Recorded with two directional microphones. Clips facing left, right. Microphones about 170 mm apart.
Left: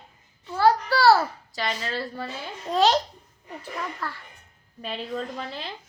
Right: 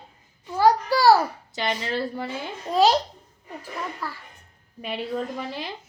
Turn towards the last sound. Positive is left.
turn(degrees=-10)  # may be behind; listen again after turning